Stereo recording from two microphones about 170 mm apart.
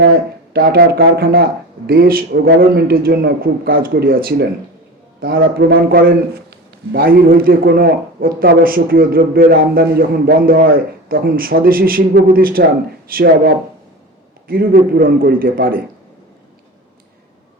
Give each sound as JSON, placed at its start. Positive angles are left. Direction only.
{"t": 0.5, "sound": "a man's voice", "side_deg": -65}